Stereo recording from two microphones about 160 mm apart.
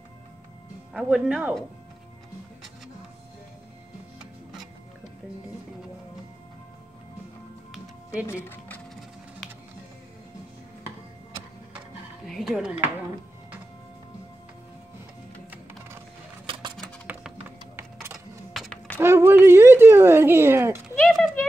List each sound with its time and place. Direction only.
0.9 s speech: centre (ahead or behind)
7.7 s music: 10° right (ahead or behind)
12.3 s speech: centre (ahead or behind)
18.1 s a sound: centre (ahead or behind)
18.9 s speech: 15° right (ahead or behind)
20.9 s a sound: 5° left (ahead or behind)